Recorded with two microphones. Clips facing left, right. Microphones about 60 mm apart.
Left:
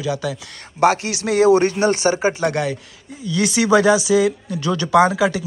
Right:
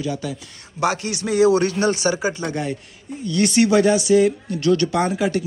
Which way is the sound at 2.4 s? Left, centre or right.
Left.